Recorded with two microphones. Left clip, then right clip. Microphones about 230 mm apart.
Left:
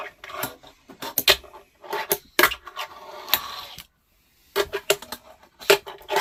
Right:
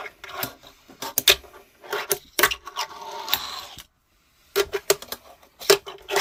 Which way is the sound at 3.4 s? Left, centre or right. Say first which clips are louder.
Right 1 dB; centre.